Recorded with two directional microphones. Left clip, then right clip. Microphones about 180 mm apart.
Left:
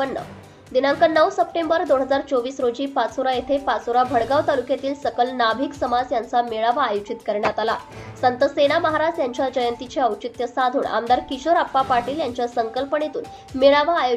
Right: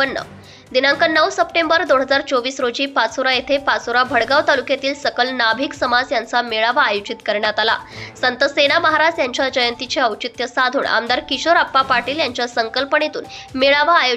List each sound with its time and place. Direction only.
0.7 s a woman's voice: 10° right (ahead or behind)